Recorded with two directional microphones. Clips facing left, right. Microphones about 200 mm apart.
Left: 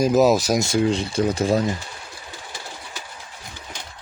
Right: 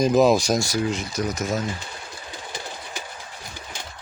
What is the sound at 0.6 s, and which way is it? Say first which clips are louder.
Speech: left 5 dB; 30° left (ahead or behind).